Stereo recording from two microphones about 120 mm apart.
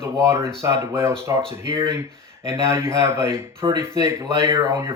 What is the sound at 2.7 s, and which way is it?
Speech, 20° right (ahead or behind).